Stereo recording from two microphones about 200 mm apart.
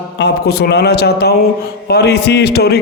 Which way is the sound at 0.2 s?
55° left (ahead or behind).